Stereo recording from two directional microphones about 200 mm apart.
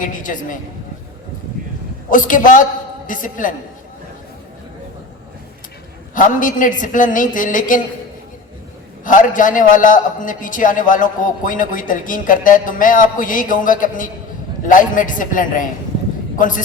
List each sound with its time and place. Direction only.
0.0 s a man's voice: 40° left (ahead or behind)
2.0 s a man's voice: 40° left (ahead or behind)
6.1 s a man's voice: 40° left (ahead or behind)
9.0 s a man's voice: 40° left (ahead or behind)